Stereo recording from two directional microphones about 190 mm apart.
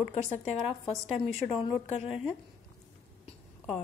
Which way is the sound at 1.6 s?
30° left (ahead or behind).